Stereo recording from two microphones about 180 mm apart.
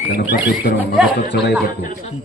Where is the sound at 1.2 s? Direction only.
70° left (ahead or behind).